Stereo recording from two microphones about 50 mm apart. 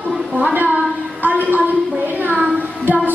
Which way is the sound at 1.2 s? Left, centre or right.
Right.